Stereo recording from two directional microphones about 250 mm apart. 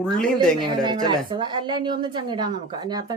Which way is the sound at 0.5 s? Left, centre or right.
Centre.